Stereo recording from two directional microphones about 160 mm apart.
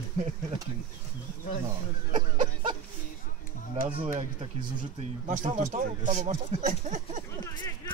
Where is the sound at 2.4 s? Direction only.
40° right (ahead or behind).